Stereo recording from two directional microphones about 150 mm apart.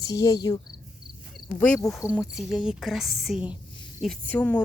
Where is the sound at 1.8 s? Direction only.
20° left (ahead or behind).